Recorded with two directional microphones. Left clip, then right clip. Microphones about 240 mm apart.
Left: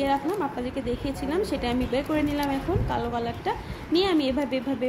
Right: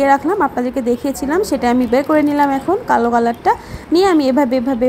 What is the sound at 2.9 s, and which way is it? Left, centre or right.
Speech, right.